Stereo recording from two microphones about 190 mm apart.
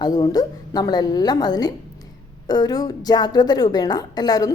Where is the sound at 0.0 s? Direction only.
20° left (ahead or behind).